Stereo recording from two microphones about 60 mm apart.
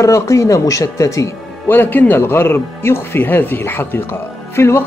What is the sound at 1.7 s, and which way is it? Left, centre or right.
Speech, left.